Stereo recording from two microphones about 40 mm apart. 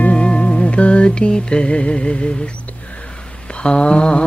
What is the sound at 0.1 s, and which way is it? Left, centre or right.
Music, left.